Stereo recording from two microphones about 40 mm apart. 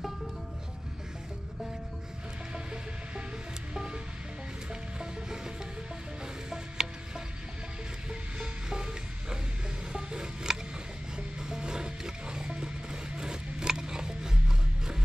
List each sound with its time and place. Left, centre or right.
3.7 s music: right
6.5 s music: centre
9.9 s a sound: centre
11.1 s music: centre